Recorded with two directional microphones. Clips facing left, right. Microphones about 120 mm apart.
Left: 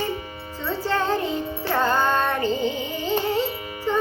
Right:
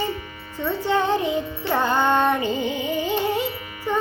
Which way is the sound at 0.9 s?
20° right (ahead or behind).